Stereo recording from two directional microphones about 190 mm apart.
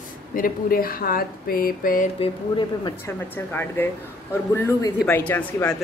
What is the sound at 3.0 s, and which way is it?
A woman's voice, 10° left (ahead or behind).